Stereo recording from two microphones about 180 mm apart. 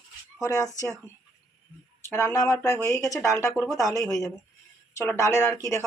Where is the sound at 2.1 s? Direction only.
15° left (ahead or behind).